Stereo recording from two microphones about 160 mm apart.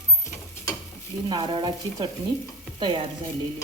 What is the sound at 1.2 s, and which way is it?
Speech, 30° right (ahead or behind).